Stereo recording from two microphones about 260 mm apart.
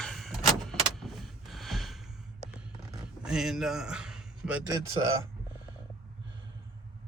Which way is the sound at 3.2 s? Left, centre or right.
Centre.